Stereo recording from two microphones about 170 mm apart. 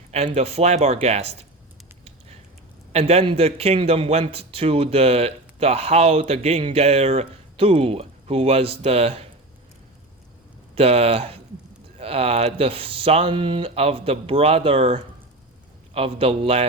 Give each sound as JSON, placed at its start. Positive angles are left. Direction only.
{"t": 0.3, "sound": "speech", "side_deg": -40}
{"t": 2.9, "sound": "speech", "side_deg": -35}
{"t": 10.8, "sound": "speech", "side_deg": -35}